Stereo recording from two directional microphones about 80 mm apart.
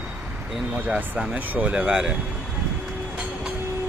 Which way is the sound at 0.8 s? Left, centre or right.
Centre.